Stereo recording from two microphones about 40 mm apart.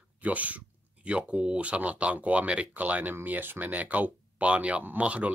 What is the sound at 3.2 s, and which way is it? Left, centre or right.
Speech, right.